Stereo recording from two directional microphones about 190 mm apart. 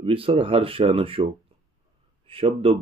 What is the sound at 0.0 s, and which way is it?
Speech, 30° right (ahead or behind).